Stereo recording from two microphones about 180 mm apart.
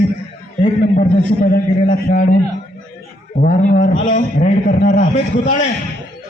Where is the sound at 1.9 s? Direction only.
45° left (ahead or behind).